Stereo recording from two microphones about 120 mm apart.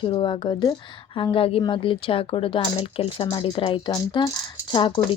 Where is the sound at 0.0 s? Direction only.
40° left (ahead or behind).